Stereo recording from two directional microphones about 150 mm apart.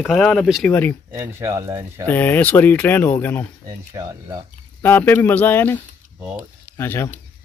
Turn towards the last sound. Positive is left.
turn(degrees=15)  # may be behind; listen again after turning